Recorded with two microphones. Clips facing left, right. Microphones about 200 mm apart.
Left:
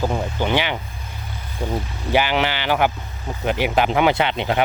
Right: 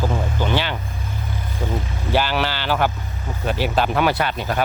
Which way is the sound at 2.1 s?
15° left (ahead or behind).